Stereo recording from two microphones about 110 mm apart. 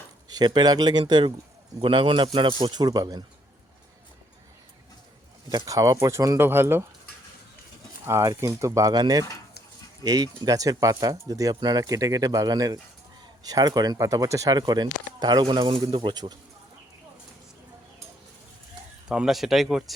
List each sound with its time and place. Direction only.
0.3 s speech: 40° right (ahead or behind)
1.8 s speech: 50° right (ahead or behind)
5.5 s speech: 35° right (ahead or behind)
8.0 s speech: 25° right (ahead or behind)
15.4 s speech: 50° right (ahead or behind)
19.0 s speech: 5° right (ahead or behind)